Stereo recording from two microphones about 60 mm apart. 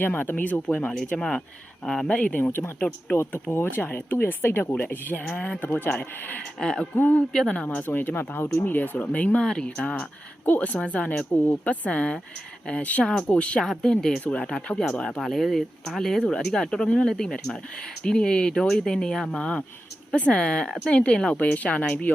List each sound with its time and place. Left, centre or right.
0.0 s speech: left
0.7 s speech: centre
6.6 s speech: centre
6.9 s speech: left
9.4 s speech: centre
15.2 s speech: centre; by 22.1 s left